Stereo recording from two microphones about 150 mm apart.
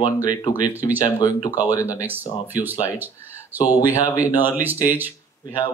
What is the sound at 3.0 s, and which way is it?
Speech, 15° right (ahead or behind).